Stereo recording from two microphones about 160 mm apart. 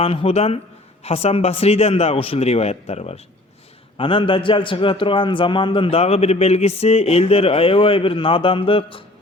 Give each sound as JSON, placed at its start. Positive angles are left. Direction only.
{"t": 0.0, "sound": "a man's voice", "side_deg": 35}